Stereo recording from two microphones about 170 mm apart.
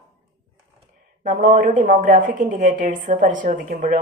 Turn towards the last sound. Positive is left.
turn(degrees=-50)  # may be behind; listen again after turning